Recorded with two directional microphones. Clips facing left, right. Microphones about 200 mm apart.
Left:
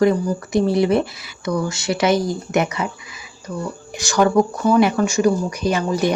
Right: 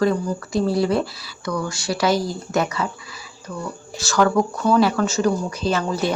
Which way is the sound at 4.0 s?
15° left (ahead or behind).